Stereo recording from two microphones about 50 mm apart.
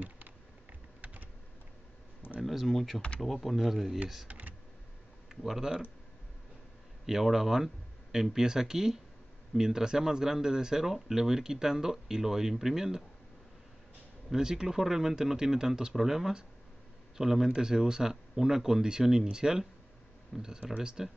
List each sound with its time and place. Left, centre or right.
1.0 s typing: right
2.4 s speech: centre
4.3 s computer keyboard: right
5.3 s speech: centre
7.1 s speech: centre
14.3 s speech: centre